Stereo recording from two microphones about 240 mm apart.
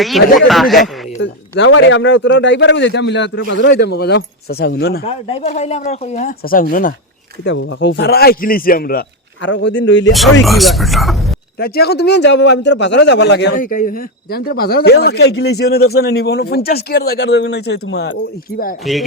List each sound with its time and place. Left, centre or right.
0.3 s speech: centre
1.2 s a man's voice: left
5.0 s speech: left
7.4 s a man's voice: left
10.4 s speech: centre
11.6 s a man's voice: left